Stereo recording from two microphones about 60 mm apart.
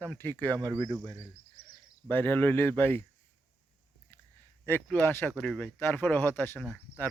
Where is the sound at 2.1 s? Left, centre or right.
Left.